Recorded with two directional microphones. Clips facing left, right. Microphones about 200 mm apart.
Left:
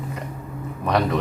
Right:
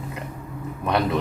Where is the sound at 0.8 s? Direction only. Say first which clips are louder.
Left 1 dB; centre (ahead or behind).